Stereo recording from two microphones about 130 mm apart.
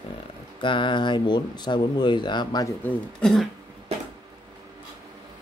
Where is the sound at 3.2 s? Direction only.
5° left (ahead or behind).